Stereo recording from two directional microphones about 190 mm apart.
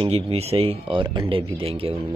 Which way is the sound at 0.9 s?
20° right (ahead or behind).